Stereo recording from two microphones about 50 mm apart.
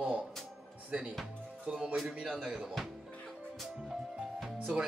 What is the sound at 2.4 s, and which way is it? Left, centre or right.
Speech, centre.